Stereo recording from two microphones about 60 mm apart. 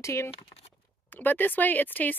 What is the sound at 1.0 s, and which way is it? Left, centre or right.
Speech, left.